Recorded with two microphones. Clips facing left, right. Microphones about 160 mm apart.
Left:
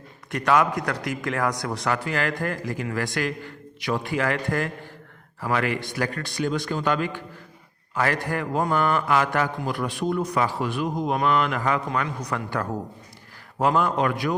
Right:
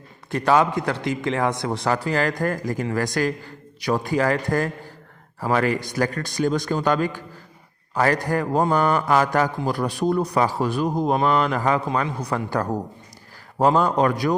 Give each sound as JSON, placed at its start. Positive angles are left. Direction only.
{"t": 0.3, "sound": "a man's voice", "side_deg": -30}